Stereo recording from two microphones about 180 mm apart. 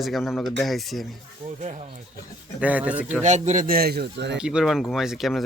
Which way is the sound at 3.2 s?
40° right (ahead or behind).